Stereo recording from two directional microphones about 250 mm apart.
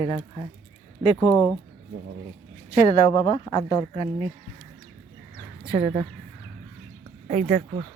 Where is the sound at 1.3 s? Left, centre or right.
Centre.